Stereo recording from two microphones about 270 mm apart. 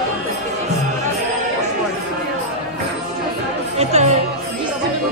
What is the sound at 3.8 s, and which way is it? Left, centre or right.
Music, right.